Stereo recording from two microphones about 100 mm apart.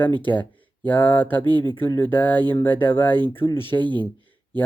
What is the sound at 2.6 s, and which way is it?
Speech, 20° left (ahead or behind).